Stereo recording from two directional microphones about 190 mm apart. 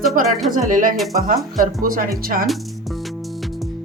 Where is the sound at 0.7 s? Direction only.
45° right (ahead or behind).